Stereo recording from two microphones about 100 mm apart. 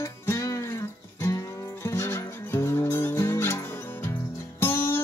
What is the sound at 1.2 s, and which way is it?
Livestock, 25° left (ahead or behind).